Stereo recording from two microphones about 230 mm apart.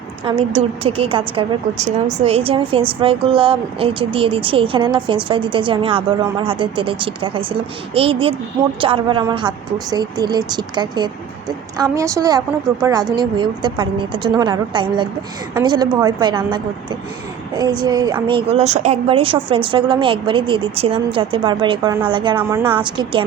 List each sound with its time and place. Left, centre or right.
0.3 s a woman's voice: right